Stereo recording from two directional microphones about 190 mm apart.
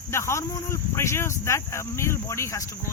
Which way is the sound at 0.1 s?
15° left (ahead or behind).